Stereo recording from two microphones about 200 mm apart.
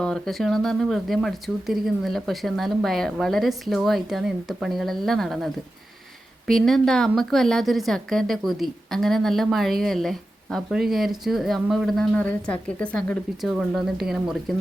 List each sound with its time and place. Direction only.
0.0 s a woman's voice: centre (ahead or behind)
6.5 s a woman's voice: centre (ahead or behind)